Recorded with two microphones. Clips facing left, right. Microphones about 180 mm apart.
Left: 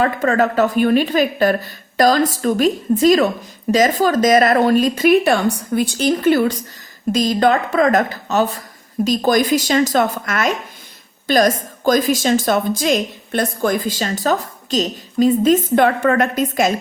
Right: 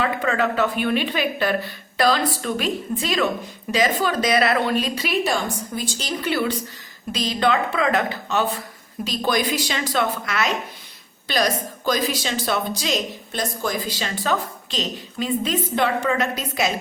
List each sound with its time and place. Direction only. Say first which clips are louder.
0.0 s a woman's voice: left 6 dB; 45° left (ahead or behind)